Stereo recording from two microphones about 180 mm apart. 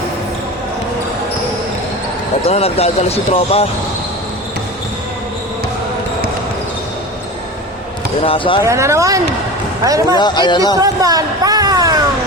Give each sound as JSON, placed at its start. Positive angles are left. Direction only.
{"t": 2.5, "sound": "speech", "side_deg": 35}
{"t": 8.2, "sound": "speech", "side_deg": 30}
{"t": 8.6, "sound": "speech", "side_deg": -15}
{"t": 10.2, "sound": "speech", "side_deg": 25}
{"t": 10.8, "sound": "speech", "side_deg": -20}